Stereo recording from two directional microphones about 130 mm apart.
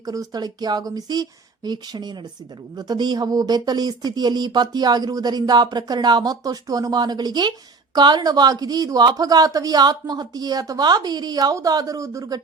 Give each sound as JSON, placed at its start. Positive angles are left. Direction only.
{"t": 0.0, "sound": "speech", "side_deg": -30}